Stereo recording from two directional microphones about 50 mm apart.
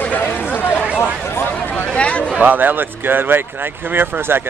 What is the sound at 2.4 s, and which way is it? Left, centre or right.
Speech, right.